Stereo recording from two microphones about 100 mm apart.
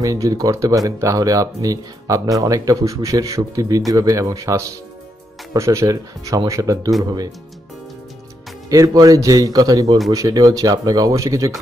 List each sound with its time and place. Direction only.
0.0 s speech: 35° right (ahead or behind)
8.6 s speech: 35° right (ahead or behind)